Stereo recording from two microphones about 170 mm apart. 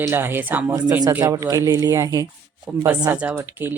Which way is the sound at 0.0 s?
15° right (ahead or behind).